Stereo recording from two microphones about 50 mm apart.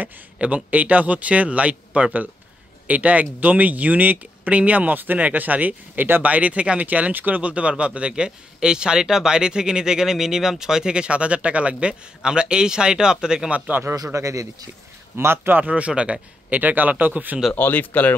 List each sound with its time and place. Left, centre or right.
0.7 s a man's voice: right
13.5 s speech: right
13.8 s a man's voice: right
15.1 s speech: right
15.5 s a man's voice: right
17.6 s speech: left